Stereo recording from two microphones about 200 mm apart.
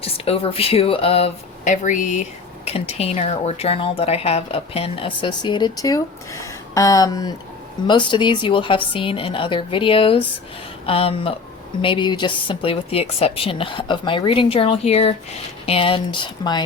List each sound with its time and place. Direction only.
0.0 s speech: 30° left (ahead or behind)